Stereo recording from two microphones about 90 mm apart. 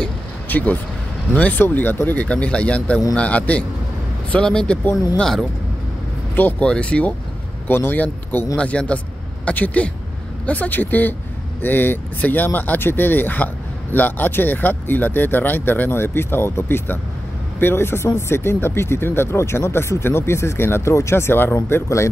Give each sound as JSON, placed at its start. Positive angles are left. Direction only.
{"t": 0.5, "sound": "speech", "side_deg": 20}
{"t": 6.6, "sound": "speech", "side_deg": 10}